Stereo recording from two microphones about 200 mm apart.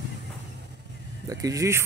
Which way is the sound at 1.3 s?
15° right (ahead or behind).